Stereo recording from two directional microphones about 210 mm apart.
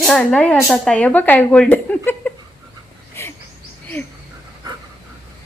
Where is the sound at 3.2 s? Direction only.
10° left (ahead or behind).